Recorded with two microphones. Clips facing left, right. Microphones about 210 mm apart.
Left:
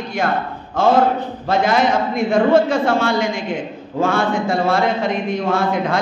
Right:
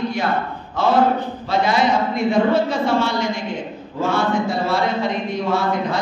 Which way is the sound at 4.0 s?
50° left (ahead or behind).